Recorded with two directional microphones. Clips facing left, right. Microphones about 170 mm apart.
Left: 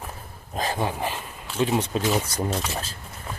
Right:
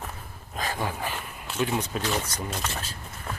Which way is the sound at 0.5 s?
30° left (ahead or behind).